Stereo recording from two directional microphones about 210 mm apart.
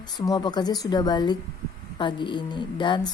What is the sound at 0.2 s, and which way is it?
A woman's voice, 20° left (ahead or behind).